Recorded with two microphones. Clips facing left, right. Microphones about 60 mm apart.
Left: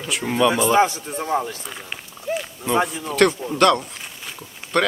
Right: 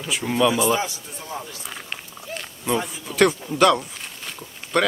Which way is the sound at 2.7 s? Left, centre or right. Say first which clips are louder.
Left 7 dB; left.